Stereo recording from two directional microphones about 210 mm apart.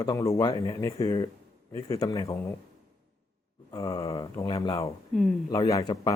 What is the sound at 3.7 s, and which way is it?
Speech, 15° left (ahead or behind).